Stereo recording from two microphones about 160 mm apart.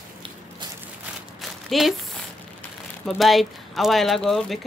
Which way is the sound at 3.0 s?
Centre (ahead or behind).